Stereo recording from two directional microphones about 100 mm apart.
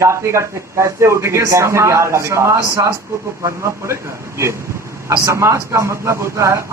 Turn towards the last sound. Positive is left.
turn(degrees=-30)  # may be behind; listen again after turning